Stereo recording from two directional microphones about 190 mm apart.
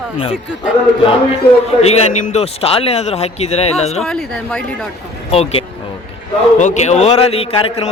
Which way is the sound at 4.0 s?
5° left (ahead or behind).